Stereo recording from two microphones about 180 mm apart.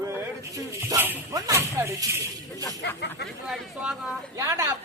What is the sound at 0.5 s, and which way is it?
Speech, 15° right (ahead or behind).